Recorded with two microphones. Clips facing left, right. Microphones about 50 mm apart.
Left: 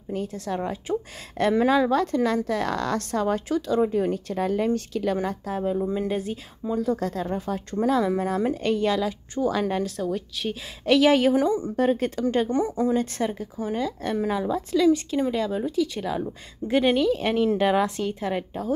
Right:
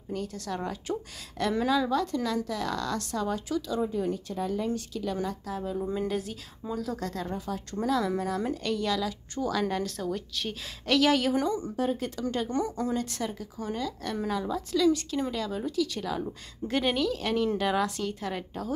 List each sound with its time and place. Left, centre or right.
0.1 s a woman's voice: left
1.7 s a woman's voice: left
5.8 s a woman's voice: left
6.6 s speech: centre
7.0 s speech: left
8.4 s a woman's voice: centre
8.7 s a woman's voice: left
9.8 s a woman's voice: centre; by 11.7 s left
11.7 s a woman's voice: left
12.4 s a woman's voice: left
17.1 s a woman's voice: left